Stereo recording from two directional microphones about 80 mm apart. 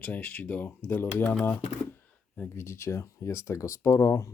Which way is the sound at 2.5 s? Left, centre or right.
Left.